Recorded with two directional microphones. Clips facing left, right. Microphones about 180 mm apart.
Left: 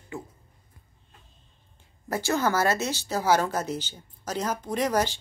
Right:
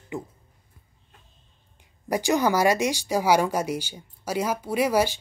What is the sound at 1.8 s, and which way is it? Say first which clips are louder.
Speech: right 4 dB; 15° right (ahead or behind).